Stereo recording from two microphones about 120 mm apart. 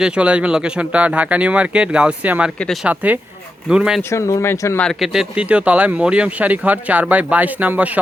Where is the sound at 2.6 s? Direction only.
Centre (ahead or behind).